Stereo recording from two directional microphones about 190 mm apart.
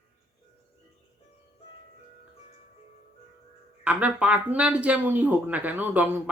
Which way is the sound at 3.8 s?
5° right (ahead or behind).